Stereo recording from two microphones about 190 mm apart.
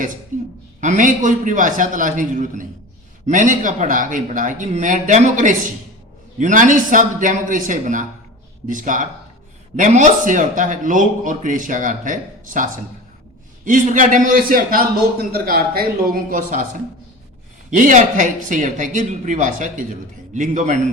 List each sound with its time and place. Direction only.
0.8 s a man's voice: 40° right (ahead or behind)
17.7 s speech: 40° right (ahead or behind)